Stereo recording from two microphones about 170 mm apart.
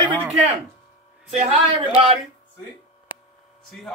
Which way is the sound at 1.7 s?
35° right (ahead or behind).